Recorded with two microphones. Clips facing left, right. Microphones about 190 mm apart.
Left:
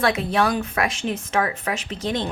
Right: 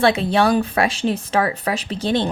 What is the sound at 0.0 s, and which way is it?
Speech, 30° right (ahead or behind).